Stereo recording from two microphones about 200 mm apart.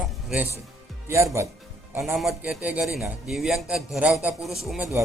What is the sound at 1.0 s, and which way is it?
Speech, 15° right (ahead or behind).